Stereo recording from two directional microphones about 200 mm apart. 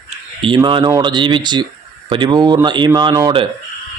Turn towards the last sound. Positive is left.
turn(degrees=-20)  # may be behind; listen again after turning